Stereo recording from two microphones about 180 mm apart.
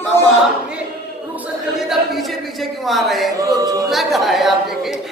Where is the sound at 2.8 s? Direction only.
Centre (ahead or behind).